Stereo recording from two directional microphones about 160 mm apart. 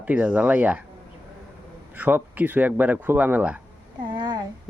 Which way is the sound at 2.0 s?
10° right (ahead or behind).